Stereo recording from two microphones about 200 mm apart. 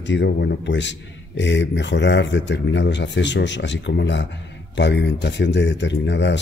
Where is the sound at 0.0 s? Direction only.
60° left (ahead or behind).